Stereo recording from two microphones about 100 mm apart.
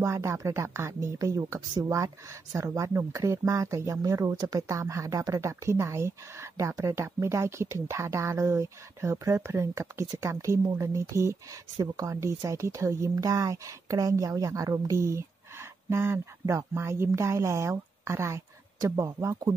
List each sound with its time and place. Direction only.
0.0 s a woman's voice: 30° right (ahead or behind)